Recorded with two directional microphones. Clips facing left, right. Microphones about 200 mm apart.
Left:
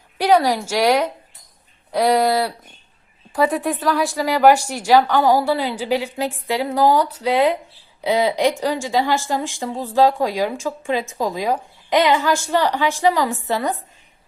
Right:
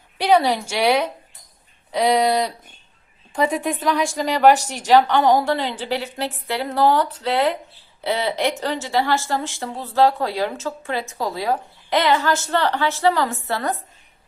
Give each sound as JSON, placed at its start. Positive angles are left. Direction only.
{"t": 0.2, "sound": "speech", "side_deg": 10}
{"t": 1.9, "sound": "speech", "side_deg": 10}